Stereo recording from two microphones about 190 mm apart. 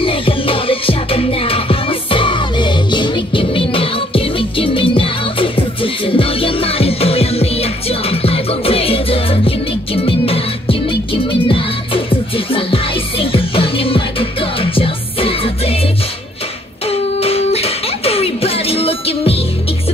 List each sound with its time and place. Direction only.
0.0 s music: 25° left (ahead or behind)
16.8 s music: 30° left (ahead or behind)